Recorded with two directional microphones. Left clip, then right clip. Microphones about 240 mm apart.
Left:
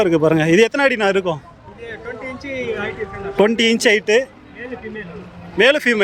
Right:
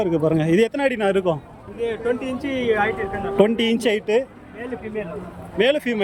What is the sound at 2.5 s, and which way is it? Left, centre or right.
Speech, right.